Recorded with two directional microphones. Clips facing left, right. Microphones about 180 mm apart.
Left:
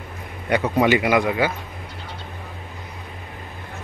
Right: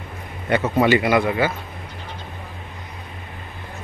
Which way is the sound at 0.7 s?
10° left (ahead or behind).